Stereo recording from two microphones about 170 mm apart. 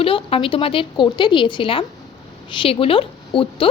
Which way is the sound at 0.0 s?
30° left (ahead or behind).